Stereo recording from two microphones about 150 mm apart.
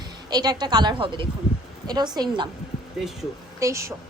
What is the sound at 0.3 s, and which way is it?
A woman's voice, 25° right (ahead or behind).